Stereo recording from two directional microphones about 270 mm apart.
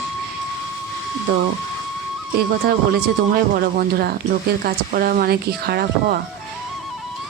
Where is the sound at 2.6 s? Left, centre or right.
Right.